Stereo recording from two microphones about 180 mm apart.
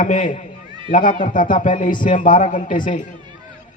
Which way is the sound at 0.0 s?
45° left (ahead or behind).